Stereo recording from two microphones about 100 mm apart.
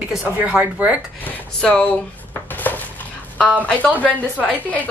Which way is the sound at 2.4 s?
15° left (ahead or behind).